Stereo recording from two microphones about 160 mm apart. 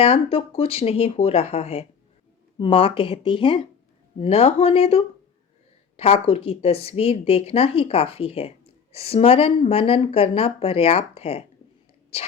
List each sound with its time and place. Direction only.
0.0 s a woman's voice: 40° left (ahead or behind)